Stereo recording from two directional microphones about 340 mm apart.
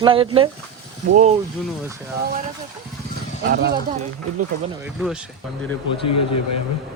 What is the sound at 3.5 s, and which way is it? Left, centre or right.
Speech, right.